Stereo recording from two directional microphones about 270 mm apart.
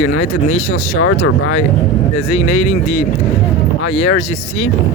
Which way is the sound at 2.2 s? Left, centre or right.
Left.